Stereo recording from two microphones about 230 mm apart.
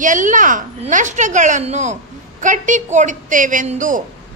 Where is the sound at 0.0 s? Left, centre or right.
Right.